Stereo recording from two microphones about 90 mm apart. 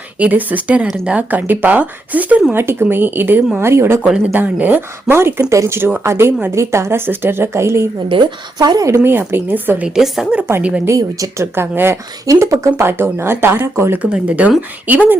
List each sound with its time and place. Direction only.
0.2 s speech: 15° right (ahead or behind)
2.5 s speech: 25° right (ahead or behind)
4.3 s speech: 20° right (ahead or behind)
8.1 s a woman's voice: 70° right (ahead or behind)
8.5 s speech: 45° right (ahead or behind)
9.0 s speech: 25° right (ahead or behind)
9.8 s speech: 5° right (ahead or behind)
10.8 s speech: 35° right (ahead or behind)
12.2 s speech: 40° right (ahead or behind)
14.0 s speech: 15° right (ahead or behind)